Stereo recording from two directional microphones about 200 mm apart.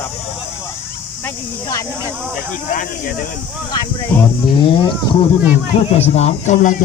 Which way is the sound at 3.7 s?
15° left (ahead or behind).